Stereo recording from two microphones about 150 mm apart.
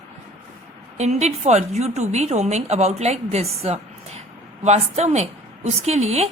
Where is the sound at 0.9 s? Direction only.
50° right (ahead or behind).